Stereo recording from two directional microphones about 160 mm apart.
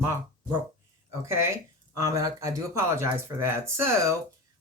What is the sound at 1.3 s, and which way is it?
Speech, 15° right (ahead or behind).